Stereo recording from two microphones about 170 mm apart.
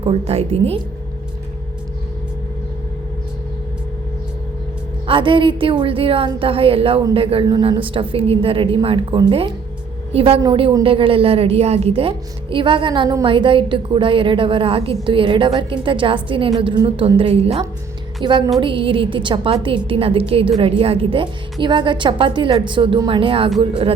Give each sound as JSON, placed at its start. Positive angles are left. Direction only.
{"t": 0.0, "sound": "a woman's voice", "side_deg": -35}
{"t": 5.0, "sound": "a woman's voice", "side_deg": -30}
{"t": 18.2, "sound": "music", "side_deg": -30}
{"t": 18.6, "sound": "a woman's voice", "side_deg": -30}